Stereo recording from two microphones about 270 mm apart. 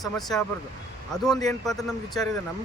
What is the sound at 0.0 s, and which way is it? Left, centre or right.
Speech, centre.